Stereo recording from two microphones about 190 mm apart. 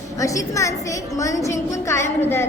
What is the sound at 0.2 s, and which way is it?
A woman's voice, 15° left (ahead or behind).